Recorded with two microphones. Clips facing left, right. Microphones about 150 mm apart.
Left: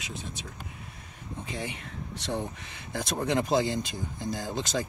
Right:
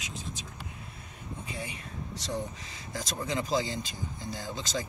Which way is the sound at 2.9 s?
60° left (ahead or behind).